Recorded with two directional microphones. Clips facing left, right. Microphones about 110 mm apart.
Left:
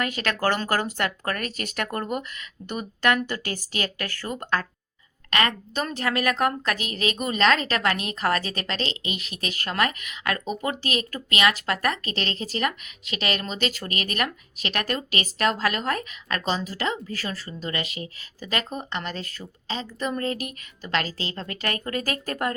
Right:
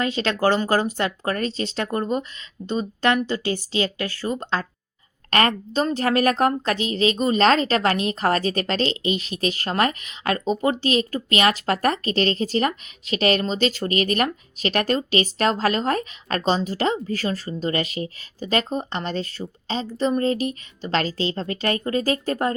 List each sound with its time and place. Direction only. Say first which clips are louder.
0.0 s speech: right 4 dB; 25° right (ahead or behind)
5.3 s a woman's voice: right 4 dB; 35° right (ahead or behind)